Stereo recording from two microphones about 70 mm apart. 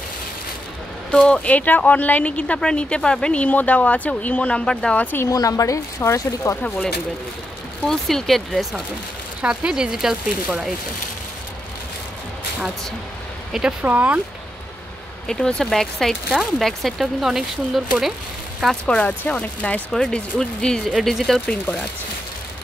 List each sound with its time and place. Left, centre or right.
1.1 s speech: centre
4.9 s speech: left
5.3 s a woman's voice: left
5.9 s speech: left
7.8 s speech: centre
9.4 s speech: centre
13.5 s speech: centre
13.8 s speech: right
15.2 s speech: centre
18.9 s speech: centre